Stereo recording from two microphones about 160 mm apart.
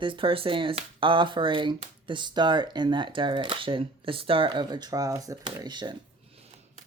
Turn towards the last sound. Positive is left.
turn(degrees=-30)  # may be behind; listen again after turning